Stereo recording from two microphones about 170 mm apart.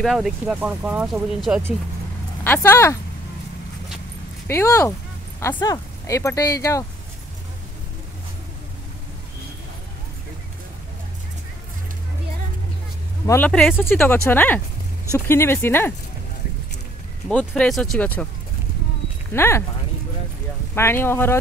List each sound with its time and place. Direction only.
0.0 s speech: centre (ahead or behind)
2.4 s speech: 10° left (ahead or behind)
4.5 s speech: 15° left (ahead or behind)
13.3 s speech: 5° left (ahead or behind)
17.3 s speech: 5° left (ahead or behind)
19.3 s speech: 15° left (ahead or behind)
20.7 s speech: 15° left (ahead or behind)